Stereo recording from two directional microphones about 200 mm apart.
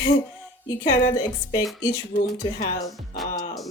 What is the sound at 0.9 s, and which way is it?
Speech, 20° left (ahead or behind).